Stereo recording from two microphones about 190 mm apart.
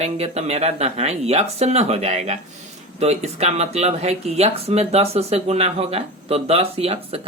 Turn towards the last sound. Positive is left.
turn(degrees=-30)  # may be behind; listen again after turning